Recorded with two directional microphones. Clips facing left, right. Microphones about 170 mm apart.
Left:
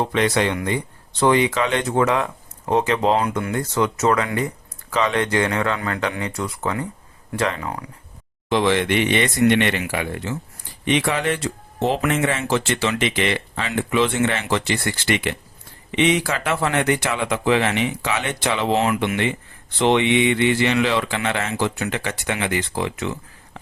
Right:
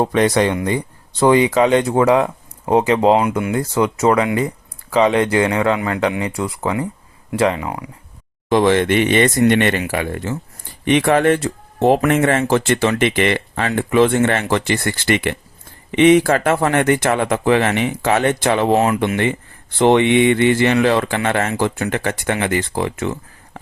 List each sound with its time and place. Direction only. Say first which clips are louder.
0.0 s speech: right 5 dB; 45° right (ahead or behind); by 6.4 s 20° right (ahead or behind)
6.4 s speech: right 3 dB; 30° right (ahead or behind)
8.4 s speech: right 5 dB; 45° right (ahead or behind)